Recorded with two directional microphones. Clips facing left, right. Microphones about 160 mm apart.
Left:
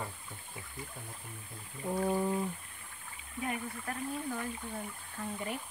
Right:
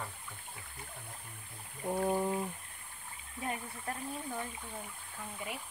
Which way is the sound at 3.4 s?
25° right (ahead or behind).